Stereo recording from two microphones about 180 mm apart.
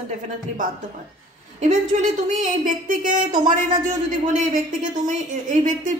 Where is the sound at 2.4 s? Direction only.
45° right (ahead or behind).